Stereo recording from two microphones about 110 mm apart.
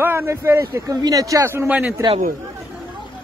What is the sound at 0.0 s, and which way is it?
Speech, 20° right (ahead or behind).